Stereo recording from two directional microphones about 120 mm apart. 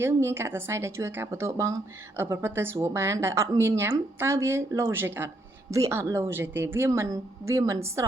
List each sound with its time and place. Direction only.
0.0 s speech: 20° right (ahead or behind)